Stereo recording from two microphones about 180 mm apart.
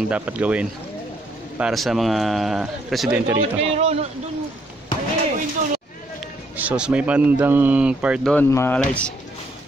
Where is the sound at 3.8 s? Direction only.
35° right (ahead or behind).